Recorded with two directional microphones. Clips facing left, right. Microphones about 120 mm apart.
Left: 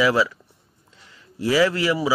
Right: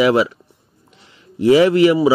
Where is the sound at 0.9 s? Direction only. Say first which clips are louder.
Right 8 dB; 20° right (ahead or behind).